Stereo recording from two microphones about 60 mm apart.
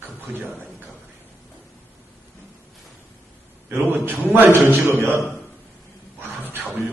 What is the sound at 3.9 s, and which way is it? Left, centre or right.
A man's voice, right.